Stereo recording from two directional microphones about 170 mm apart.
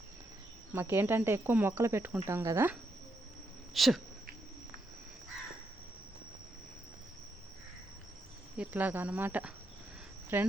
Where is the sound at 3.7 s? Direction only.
Centre (ahead or behind).